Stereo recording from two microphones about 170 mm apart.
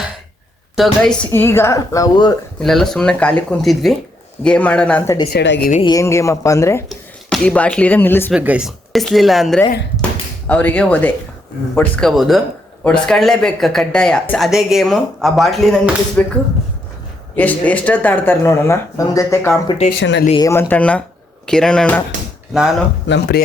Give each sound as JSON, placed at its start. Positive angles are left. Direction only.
{"t": 0.8, "sound": "speech", "side_deg": 5}
{"t": 1.3, "sound": "speech", "side_deg": 15}
{"t": 2.6, "sound": "speech", "side_deg": 0}
{"t": 5.3, "sound": "speech", "side_deg": 80}
{"t": 5.8, "sound": "speech", "side_deg": 20}
{"t": 6.8, "sound": "speech", "side_deg": 0}
{"t": 8.3, "sound": "speech", "side_deg": -5}
{"t": 17.3, "sound": "speech", "side_deg": 10}
{"t": 20.0, "sound": "speech", "side_deg": 90}
{"t": 20.3, "sound": "speech", "side_deg": 20}
{"t": 23.0, "sound": "speech", "side_deg": 90}